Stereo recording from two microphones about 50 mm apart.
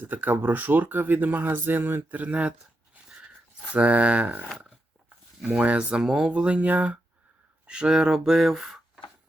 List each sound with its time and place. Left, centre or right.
0.0 s speech: right
3.7 s speech: right
5.5 s speech: right
6.0 s speech: centre
6.3 s speech: right
7.7 s speech: centre